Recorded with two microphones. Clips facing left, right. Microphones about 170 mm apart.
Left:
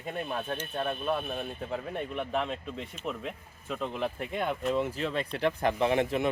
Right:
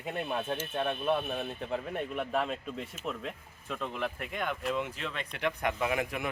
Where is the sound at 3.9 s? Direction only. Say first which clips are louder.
Left 4 dB; 30° left (ahead or behind).